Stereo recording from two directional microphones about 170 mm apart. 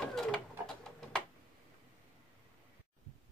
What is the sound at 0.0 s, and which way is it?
Printer, centre (ahead or behind).